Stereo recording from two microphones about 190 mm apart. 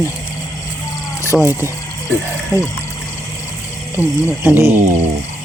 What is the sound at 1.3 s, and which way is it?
Speech, centre (ahead or behind).